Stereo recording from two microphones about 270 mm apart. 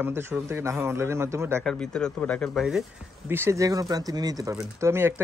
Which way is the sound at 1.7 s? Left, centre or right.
Centre.